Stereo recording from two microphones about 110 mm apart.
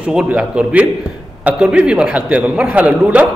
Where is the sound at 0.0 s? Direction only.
10° right (ahead or behind).